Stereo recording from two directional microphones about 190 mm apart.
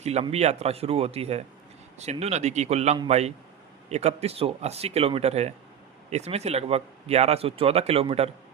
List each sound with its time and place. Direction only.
0.0 s speech: 35° right (ahead or behind)